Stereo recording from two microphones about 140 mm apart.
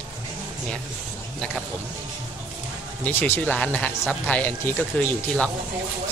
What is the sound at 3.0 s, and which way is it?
Speech, 15° left (ahead or behind).